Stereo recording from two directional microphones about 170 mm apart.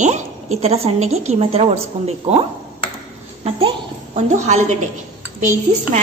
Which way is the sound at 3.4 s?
35° right (ahead or behind).